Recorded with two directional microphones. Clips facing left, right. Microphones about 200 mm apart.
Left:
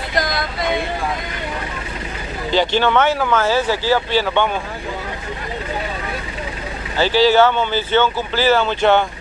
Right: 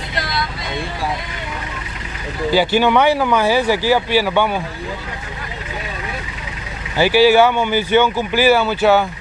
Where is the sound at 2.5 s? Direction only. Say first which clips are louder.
Right 2 dB; 10° right (ahead or behind).